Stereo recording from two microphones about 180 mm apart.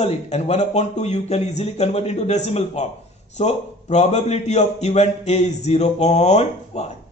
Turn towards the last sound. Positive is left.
turn(degrees=35)  # may be behind; listen again after turning